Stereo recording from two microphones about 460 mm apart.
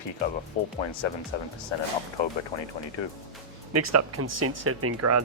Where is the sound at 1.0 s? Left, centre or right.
Left.